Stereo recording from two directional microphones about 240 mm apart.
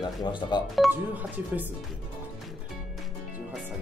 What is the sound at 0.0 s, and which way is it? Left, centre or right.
Speech, centre.